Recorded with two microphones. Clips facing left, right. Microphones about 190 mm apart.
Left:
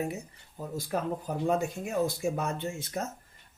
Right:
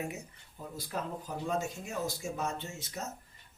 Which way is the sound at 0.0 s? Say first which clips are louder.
Left 5 dB; 35° left (ahead or behind).